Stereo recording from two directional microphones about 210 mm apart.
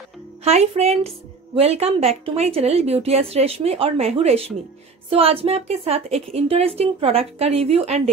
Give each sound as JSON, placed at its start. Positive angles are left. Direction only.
{"t": 0.4, "sound": "a woman's voice", "side_deg": -30}